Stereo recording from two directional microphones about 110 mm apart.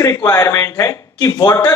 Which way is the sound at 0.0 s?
25° left (ahead or behind).